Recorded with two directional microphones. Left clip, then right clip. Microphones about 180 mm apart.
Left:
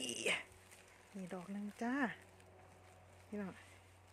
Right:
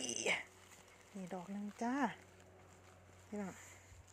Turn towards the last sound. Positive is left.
turn(degrees=5)  # may be behind; listen again after turning